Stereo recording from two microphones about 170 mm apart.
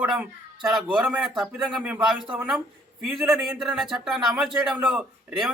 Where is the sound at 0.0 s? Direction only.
10° right (ahead or behind).